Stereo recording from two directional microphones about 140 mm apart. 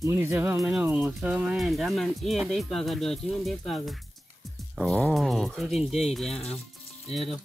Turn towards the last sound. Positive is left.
turn(degrees=0)  # may be behind; listen again after turning